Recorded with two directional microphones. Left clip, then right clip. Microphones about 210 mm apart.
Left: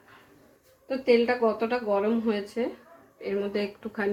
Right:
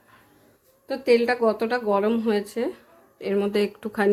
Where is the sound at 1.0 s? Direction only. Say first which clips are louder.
Right 3 dB; 45° right (ahead or behind).